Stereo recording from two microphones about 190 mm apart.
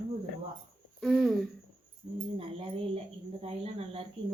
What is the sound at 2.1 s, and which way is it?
Speech, 30° right (ahead or behind).